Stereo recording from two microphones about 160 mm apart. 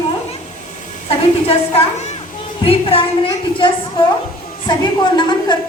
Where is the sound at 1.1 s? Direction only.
40° left (ahead or behind).